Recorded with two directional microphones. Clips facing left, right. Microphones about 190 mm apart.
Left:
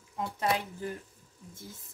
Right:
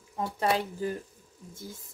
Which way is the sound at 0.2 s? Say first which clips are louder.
Right 3 dB; 30° right (ahead or behind).